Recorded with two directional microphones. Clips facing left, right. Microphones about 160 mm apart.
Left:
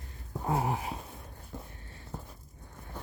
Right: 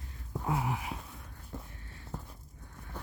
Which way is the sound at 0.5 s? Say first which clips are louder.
Left 3 dB; 35° left (ahead or behind).